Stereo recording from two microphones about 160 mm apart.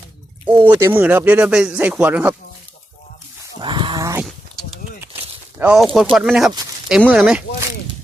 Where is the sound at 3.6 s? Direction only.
30° right (ahead or behind).